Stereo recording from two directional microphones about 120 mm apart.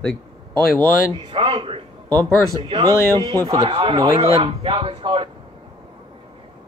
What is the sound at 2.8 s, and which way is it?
Speech, 30° right (ahead or behind).